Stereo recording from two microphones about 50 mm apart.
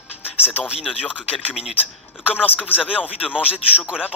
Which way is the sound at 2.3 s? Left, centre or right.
Centre.